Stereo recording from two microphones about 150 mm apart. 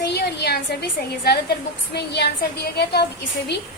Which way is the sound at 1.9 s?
90° left.